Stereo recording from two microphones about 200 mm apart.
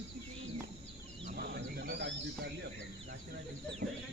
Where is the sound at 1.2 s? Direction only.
45° right (ahead or behind).